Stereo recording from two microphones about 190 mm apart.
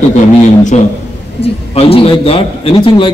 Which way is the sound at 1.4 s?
30° left (ahead or behind).